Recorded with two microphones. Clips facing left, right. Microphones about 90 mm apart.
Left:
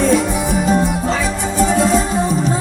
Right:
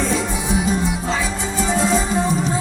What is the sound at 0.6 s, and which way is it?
Music, 50° left (ahead or behind).